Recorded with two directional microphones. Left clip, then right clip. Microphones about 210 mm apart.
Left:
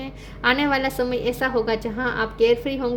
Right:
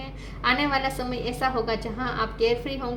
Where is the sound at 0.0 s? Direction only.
50° left (ahead or behind).